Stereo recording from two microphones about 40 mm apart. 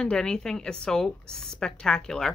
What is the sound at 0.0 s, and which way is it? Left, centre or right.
Speech, centre.